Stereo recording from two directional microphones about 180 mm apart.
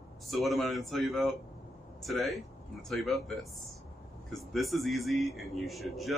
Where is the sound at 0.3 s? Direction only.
Centre (ahead or behind).